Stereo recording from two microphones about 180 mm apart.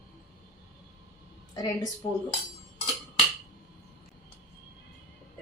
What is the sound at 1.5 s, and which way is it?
Speech, 20° left (ahead or behind).